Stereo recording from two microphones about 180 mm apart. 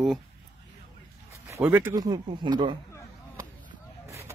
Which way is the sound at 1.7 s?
10° right (ahead or behind).